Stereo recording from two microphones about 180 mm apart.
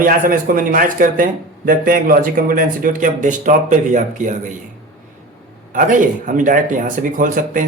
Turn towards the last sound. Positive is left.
turn(degrees=-50)  # may be behind; listen again after turning